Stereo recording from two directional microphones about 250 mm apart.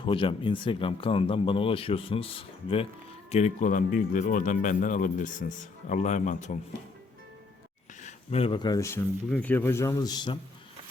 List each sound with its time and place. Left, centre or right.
0.0 s a man's voice: centre
8.0 s speech: left